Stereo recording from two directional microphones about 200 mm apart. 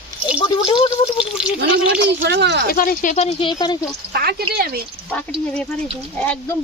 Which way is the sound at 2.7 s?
45° left (ahead or behind).